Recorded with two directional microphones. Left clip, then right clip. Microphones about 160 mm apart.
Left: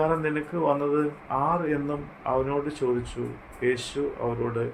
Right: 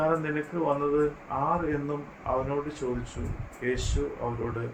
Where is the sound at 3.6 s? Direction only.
50° left (ahead or behind).